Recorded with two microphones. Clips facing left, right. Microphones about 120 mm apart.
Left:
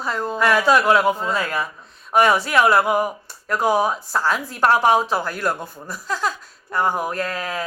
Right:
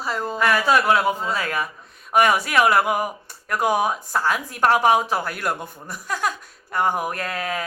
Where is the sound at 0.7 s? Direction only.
40° left (ahead or behind).